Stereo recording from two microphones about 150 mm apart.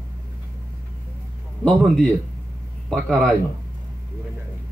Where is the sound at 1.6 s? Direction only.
5° left (ahead or behind).